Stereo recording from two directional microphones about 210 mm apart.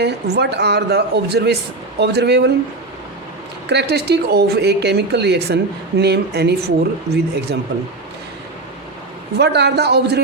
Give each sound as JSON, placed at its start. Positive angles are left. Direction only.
{"t": 0.0, "sound": "speech", "side_deg": -50}
{"t": 3.7, "sound": "speech", "side_deg": -50}
{"t": 9.4, "sound": "speech", "side_deg": -55}